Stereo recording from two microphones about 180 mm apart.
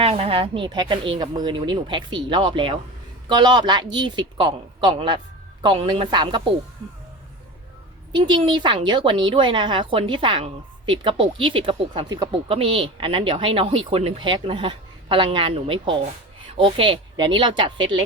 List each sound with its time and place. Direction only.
0.0 s speech: 30° right (ahead or behind)
8.1 s speech: 25° right (ahead or behind)